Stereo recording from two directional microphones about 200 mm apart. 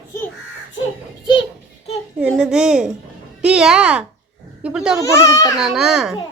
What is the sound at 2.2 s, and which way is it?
A woman's voice, 5° right (ahead or behind).